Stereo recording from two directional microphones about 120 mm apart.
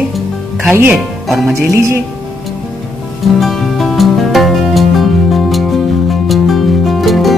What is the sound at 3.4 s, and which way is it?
Music, centre (ahead or behind).